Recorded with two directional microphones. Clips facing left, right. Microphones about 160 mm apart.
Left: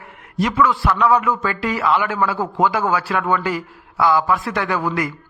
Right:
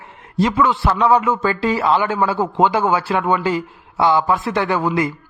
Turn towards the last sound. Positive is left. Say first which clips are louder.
# right 3 dB
turn(degrees=-25)  # may be behind; listen again after turning